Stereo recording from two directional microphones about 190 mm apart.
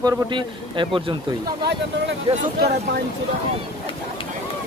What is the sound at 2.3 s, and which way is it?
Speech, 30° right (ahead or behind).